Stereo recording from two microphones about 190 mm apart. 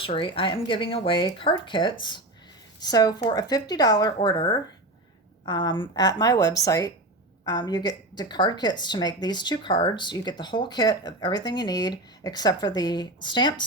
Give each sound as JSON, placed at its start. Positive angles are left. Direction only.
{"t": 0.0, "sound": "speech", "side_deg": 30}